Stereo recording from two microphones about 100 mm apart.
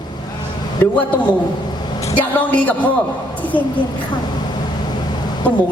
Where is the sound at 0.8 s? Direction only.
25° left (ahead or behind).